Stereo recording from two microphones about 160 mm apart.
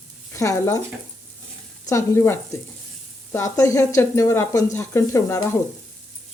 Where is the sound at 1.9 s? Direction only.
15° left (ahead or behind).